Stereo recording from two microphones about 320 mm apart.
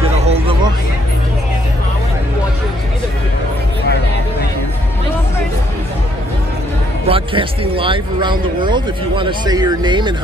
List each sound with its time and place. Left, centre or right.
0.2 s music: centre
7.1 s speech: centre